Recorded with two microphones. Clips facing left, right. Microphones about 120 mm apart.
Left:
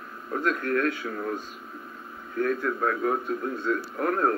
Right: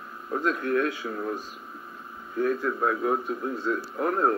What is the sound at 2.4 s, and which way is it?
A man's voice, 20° right (ahead or behind).